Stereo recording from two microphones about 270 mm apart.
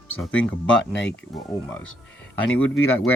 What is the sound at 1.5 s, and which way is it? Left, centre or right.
Speech, centre.